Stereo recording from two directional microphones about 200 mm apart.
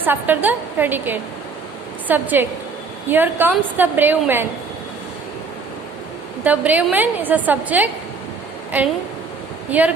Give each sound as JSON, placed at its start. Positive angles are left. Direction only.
{"t": 0.0, "sound": "a woman's voice", "side_deg": -10}
{"t": 6.4, "sound": "a woman's voice", "side_deg": -5}
{"t": 9.6, "sound": "speech", "side_deg": -10}